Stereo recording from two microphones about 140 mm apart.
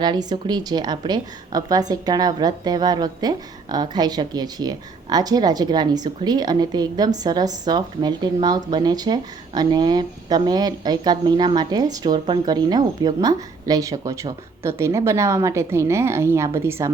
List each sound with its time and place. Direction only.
0.0 s a woman's voice: 30° right (ahead or behind)